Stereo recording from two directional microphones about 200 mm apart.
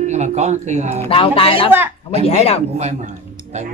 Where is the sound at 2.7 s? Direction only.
35° right (ahead or behind).